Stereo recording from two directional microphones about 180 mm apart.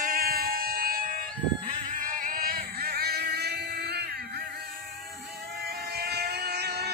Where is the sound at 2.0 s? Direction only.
50° right (ahead or behind).